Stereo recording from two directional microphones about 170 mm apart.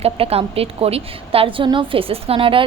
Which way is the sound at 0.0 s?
35° right (ahead or behind).